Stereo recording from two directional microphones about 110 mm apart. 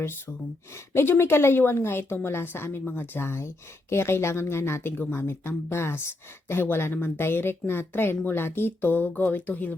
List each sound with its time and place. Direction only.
0.9 s speech: 20° left (ahead or behind)